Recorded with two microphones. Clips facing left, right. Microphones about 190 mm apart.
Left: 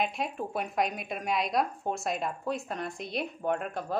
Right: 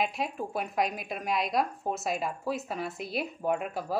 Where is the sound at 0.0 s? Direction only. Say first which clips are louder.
Even; centre (ahead or behind).